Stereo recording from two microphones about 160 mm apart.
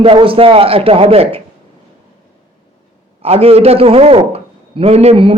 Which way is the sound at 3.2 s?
40° right (ahead or behind).